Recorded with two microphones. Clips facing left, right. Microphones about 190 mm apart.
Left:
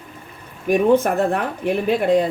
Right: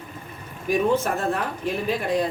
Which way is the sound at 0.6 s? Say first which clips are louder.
Left 6 dB; 60° left (ahead or behind).